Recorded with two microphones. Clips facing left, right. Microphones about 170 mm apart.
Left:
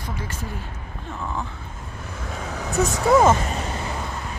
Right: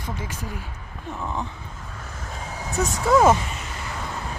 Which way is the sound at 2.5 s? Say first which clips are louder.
Left 3 dB; 70° left (ahead or behind).